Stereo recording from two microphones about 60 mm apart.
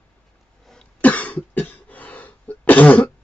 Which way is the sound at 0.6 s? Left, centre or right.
Centre.